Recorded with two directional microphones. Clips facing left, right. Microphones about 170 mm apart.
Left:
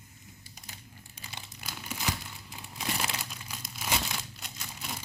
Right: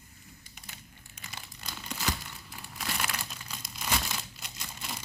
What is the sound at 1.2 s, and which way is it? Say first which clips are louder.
Crumpling: even; 35° left (ahead or behind).